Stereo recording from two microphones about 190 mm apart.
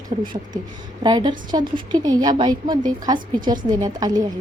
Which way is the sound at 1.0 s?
25° right (ahead or behind).